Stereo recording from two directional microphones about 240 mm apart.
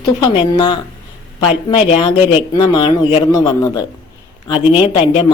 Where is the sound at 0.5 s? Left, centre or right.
Centre.